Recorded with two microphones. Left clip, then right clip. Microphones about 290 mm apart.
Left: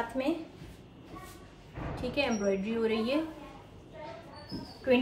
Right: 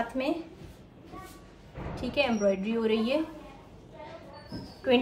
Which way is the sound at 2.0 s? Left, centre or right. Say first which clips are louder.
Right 4 dB; centre.